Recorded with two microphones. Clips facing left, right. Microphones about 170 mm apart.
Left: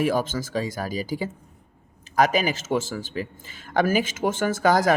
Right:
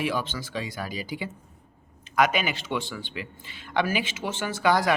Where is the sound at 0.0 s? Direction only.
45° left (ahead or behind).